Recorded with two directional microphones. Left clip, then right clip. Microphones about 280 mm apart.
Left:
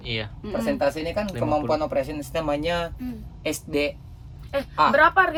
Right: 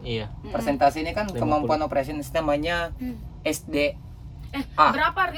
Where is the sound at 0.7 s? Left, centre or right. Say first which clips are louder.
Right 5 dB; centre.